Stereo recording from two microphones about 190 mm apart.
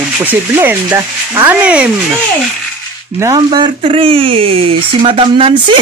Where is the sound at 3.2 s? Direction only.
20° right (ahead or behind).